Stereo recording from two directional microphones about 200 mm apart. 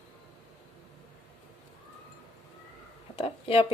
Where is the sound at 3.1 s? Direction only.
30° left (ahead or behind).